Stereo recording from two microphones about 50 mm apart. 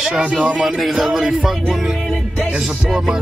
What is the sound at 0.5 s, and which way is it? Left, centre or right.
Speech, centre.